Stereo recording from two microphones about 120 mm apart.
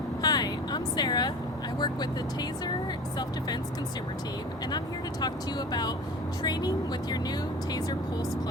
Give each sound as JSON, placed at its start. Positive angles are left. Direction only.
{"t": 0.2, "sound": "vehicle", "side_deg": 35}
{"t": 1.8, "sound": "speech", "side_deg": 35}
{"t": 5.2, "sound": "speech", "side_deg": 35}